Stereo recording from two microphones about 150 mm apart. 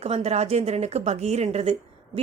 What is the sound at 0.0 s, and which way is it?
Speech, 45° right (ahead or behind).